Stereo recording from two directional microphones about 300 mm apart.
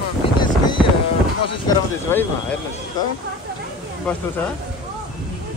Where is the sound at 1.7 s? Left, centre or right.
Centre.